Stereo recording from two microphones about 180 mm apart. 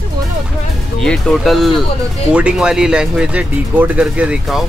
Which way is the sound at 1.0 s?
Centre (ahead or behind).